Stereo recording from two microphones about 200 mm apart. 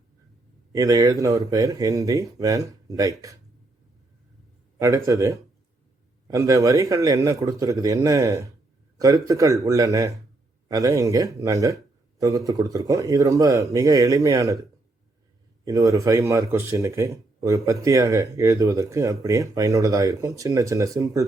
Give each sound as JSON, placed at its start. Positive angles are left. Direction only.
{"t": 0.7, "sound": "speech", "side_deg": -15}
{"t": 4.8, "sound": "speech", "side_deg": -15}
{"t": 15.6, "sound": "speech", "side_deg": -15}